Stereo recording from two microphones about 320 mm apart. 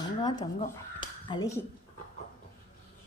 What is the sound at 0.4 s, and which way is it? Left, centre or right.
Speech, left.